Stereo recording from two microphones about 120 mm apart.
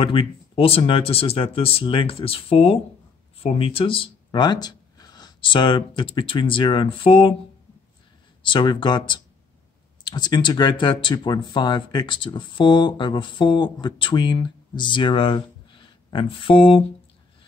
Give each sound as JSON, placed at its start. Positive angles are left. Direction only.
{"t": 0.0, "sound": "speech", "side_deg": 45}
{"t": 8.4, "sound": "speech", "side_deg": 40}